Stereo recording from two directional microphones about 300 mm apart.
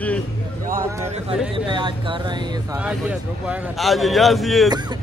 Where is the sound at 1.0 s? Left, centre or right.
Centre.